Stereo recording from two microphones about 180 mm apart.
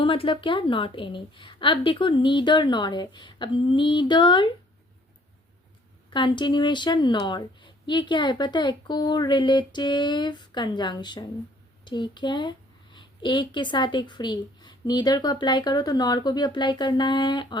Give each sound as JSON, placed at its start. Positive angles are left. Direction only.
{"t": 0.0, "sound": "a woman's voice", "side_deg": 30}
{"t": 6.1, "sound": "a woman's voice", "side_deg": 25}